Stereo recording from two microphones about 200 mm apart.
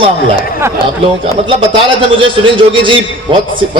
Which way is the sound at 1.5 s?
25° right (ahead or behind).